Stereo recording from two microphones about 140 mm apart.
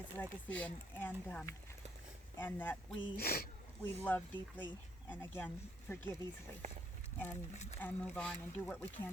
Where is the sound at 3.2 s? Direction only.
90° left.